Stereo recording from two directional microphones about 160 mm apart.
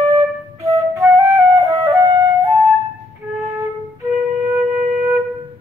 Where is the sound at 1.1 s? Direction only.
20° right (ahead or behind).